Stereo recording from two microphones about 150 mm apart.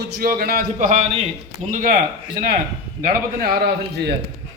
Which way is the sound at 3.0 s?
75° right (ahead or behind).